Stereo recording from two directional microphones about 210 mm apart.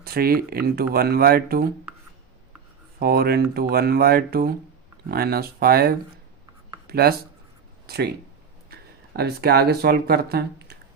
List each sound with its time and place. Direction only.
0.0 s speech: 45° right (ahead or behind)
3.0 s speech: 45° right (ahead or behind)